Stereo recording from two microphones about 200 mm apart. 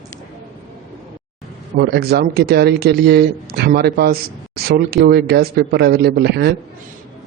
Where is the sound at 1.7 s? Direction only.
55° right (ahead or behind).